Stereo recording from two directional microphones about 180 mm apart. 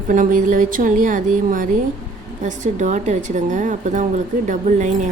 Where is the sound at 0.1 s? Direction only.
45° right (ahead or behind).